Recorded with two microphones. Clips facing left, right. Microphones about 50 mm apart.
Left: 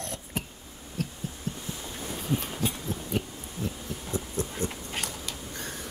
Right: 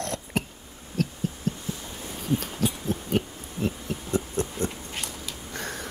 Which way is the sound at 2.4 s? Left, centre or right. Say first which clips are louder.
Right 3 dB; right.